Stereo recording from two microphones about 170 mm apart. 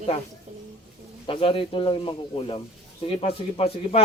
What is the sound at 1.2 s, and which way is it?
A man's voice, 30° left (ahead or behind).